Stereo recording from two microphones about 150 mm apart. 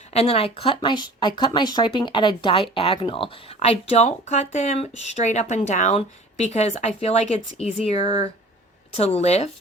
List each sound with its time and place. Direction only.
0.1 s speech: 40° left (ahead or behind)